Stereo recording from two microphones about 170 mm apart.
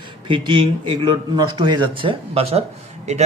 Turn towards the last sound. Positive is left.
turn(degrees=-40)  # may be behind; listen again after turning